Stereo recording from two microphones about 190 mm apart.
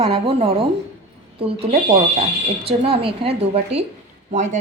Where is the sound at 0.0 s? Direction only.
30° right (ahead or behind).